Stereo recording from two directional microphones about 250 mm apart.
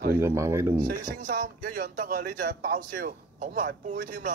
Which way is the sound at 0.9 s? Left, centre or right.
Right.